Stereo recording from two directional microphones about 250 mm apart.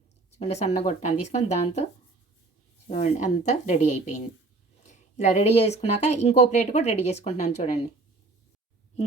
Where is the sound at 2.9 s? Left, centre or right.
Left.